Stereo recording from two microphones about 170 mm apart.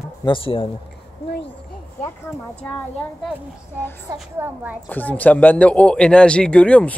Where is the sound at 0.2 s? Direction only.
30° left (ahead or behind).